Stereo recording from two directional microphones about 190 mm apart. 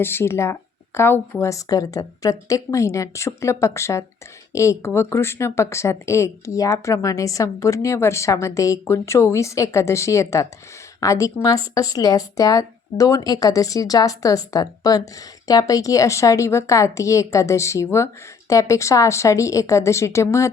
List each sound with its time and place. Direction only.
0.0 s speech: 10° left (ahead or behind)